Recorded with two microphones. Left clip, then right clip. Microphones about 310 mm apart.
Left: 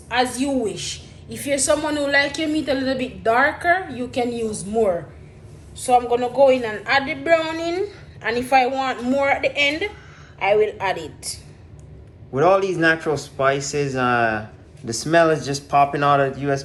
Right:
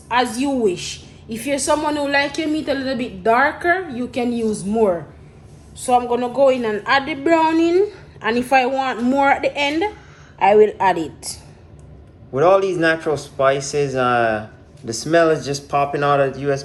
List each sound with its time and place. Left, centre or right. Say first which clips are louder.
0.1 s a woman's voice: right 2 dB; right
5.8 s a woman's voice: even; right
12.3 s a man's voice: right 2 dB; centre